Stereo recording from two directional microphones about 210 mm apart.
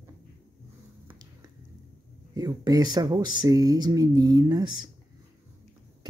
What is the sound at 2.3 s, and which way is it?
Speech, 20° right (ahead or behind).